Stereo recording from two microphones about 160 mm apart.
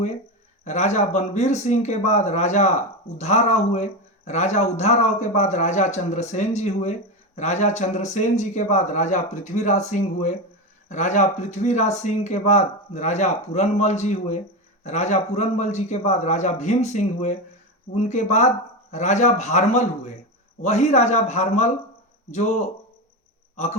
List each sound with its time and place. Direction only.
0.6 s speech: 45° left (ahead or behind)